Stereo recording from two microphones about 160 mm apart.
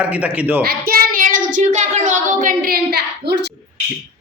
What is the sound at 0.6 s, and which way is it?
Child singing, 75° right (ahead or behind).